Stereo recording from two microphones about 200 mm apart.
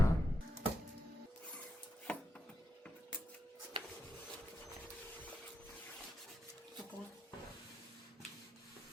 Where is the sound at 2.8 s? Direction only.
5° left (ahead or behind).